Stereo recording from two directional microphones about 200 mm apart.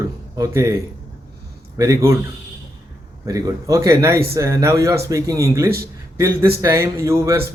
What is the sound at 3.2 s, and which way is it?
A man's voice, 15° right (ahead or behind).